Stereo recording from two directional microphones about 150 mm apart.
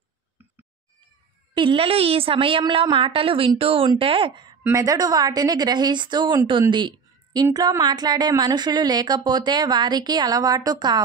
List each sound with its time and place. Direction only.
1.5 s a woman's voice: 35° right (ahead or behind)
4.6 s speech: 20° right (ahead or behind)
6.7 s a sound: 30° right (ahead or behind)
7.4 s speech: 20° right (ahead or behind)